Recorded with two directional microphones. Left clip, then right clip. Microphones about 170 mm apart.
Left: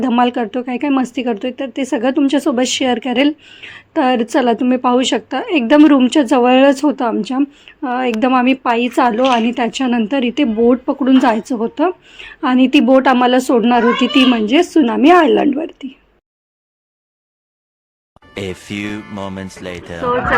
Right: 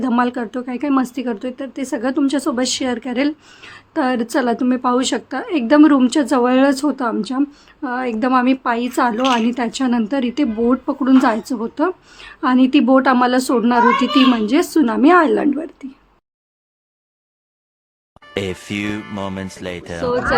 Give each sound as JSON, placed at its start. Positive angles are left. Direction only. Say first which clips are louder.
{"t": 0.2, "sound": "a woman's voice", "louder": "left 4 dB", "side_deg": 15}
{"t": 3.4, "sound": "a woman's voice", "louder": "left 5 dB", "side_deg": 0}
{"t": 18.2, "sound": "speech", "louder": "right 2 dB", "side_deg": 0}